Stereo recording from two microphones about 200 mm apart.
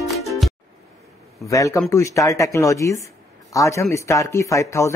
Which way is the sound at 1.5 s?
15° left (ahead or behind).